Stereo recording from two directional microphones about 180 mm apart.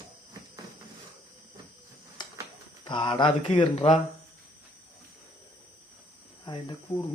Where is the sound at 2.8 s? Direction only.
25° left (ahead or behind).